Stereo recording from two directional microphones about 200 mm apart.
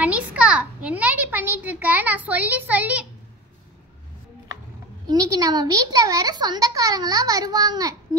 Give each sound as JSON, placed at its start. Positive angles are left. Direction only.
{"t": 0.0, "sound": "a child's voice", "side_deg": -5}
{"t": 5.0, "sound": "speech", "side_deg": -20}